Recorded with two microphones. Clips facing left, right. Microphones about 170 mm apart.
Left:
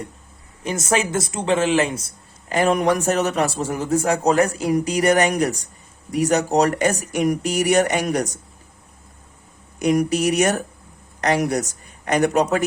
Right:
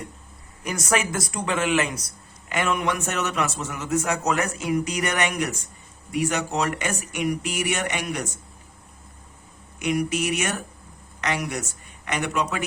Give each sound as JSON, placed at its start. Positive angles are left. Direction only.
{"t": 0.6, "sound": "speech", "side_deg": 25}
{"t": 9.7, "sound": "speech", "side_deg": 40}